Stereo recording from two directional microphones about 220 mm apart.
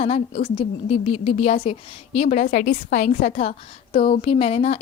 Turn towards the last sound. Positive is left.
turn(degrees=30)  # may be behind; listen again after turning